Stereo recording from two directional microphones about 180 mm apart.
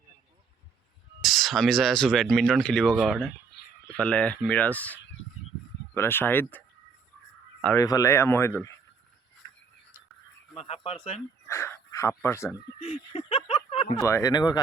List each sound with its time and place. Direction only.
1.2 s speech: centre (ahead or behind)
3.8 s speech: 5° left (ahead or behind)
7.8 s speech: 20° left (ahead or behind)
10.6 s a sound: 35° left (ahead or behind)
11.4 s speech: 15° left (ahead or behind)
12.8 s a sound: 30° left (ahead or behind)
14.0 s speech: 20° left (ahead or behind)